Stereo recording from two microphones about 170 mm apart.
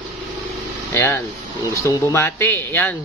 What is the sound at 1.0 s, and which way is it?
Speech, 10° left (ahead or behind).